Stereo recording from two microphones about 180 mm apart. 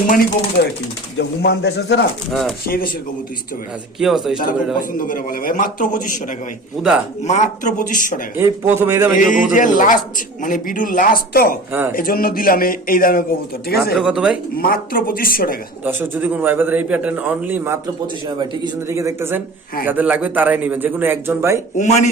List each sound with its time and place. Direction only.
0.1 s speech: 55° left (ahead or behind)
2.3 s speech: centre (ahead or behind)
2.6 s speech: 55° left (ahead or behind)
4.0 s speech: 5° right (ahead or behind)
4.4 s a man's voice: 50° left (ahead or behind)
6.8 s speech: centre (ahead or behind)
7.3 s a man's voice: 40° left (ahead or behind)
8.4 s a man's voice: 10° right (ahead or behind)
9.1 s a man's voice: 45° left (ahead or behind)
13.9 s speech: 5° right (ahead or behind)
14.5 s a man's voice: 55° left (ahead or behind)
15.8 s a man's voice: 10° right (ahead or behind)
21.8 s speech: 40° left (ahead or behind)